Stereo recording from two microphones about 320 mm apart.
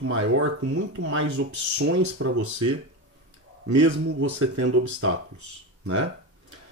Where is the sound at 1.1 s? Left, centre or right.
Right.